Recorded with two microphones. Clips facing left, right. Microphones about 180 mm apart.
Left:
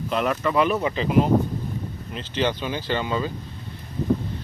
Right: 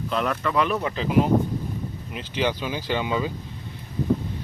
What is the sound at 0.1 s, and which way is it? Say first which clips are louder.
Speech: left 2 dB; 5° left (ahead or behind).